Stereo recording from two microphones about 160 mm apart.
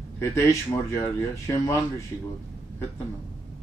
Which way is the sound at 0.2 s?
20° left (ahead or behind).